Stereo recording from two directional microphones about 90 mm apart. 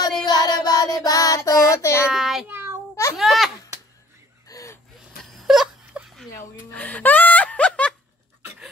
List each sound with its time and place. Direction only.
0.2 s child singing: 50° left (ahead or behind); by 2.0 s 35° left (ahead or behind)
2.1 s child singing: centre (ahead or behind)
2.4 s child singing: 25° right (ahead or behind)
3.2 s a sound: centre (ahead or behind)
4.5 s gasp: 40° left (ahead or behind)
5.3 s whimper: centre (ahead or behind)
5.9 s a sound: 10° right (ahead or behind)
6.7 s music: 15° left (ahead or behind)